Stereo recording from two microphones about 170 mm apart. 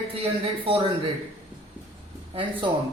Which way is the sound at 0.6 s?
30° right (ahead or behind).